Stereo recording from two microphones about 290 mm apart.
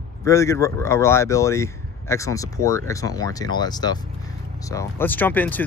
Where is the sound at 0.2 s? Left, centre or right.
Centre.